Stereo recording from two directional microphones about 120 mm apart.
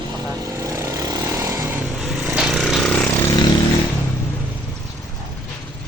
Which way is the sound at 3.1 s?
30° left (ahead or behind).